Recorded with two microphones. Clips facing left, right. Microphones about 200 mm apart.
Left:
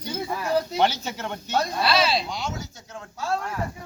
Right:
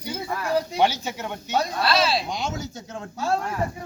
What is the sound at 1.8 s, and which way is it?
Speech, centre (ahead or behind).